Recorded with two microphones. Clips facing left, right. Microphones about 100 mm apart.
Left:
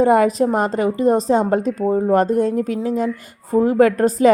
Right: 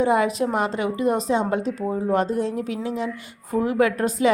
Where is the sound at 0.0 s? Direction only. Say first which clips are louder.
Left 6 dB; 45° left (ahead or behind).